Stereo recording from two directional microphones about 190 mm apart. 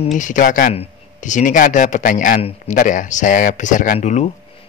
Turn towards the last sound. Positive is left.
turn(degrees=40)  # may be behind; listen again after turning